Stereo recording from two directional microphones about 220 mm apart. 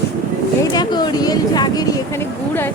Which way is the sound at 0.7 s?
20° left (ahead or behind).